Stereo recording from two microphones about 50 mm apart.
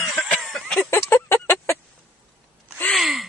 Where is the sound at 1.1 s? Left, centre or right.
Left.